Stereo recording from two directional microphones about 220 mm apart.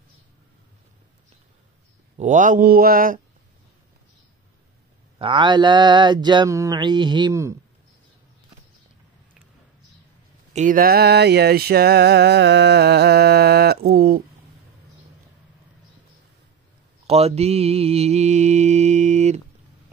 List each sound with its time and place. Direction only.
2.1 s mantra: 35° right (ahead or behind)
5.2 s mantra: 20° right (ahead or behind)
10.5 s music: 35° right (ahead or behind)
17.0 s mantra: 30° right (ahead or behind)